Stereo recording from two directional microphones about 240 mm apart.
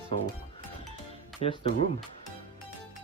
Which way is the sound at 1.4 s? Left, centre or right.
Left.